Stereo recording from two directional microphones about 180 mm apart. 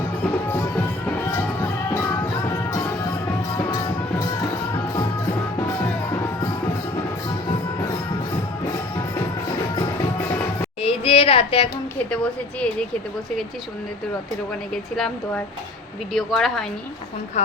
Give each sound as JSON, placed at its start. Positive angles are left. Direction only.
{"t": 0.3, "sound": "music", "side_deg": 10}
{"t": 4.2, "sound": "music", "side_deg": 20}
{"t": 9.7, "sound": "music", "side_deg": 20}
{"t": 10.8, "sound": "a sound", "side_deg": 30}
{"t": 12.1, "sound": "a woman's voice", "side_deg": 5}
{"t": 16.1, "sound": "a woman's voice", "side_deg": 0}
{"t": 17.4, "sound": "speech", "side_deg": 40}